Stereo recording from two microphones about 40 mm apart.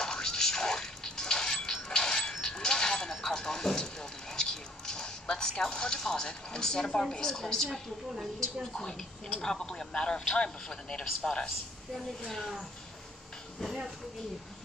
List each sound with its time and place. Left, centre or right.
0.0 s music: centre
2.3 s a sound: centre
5.7 s a woman's voice: centre
11.4 s a woman's voice: centre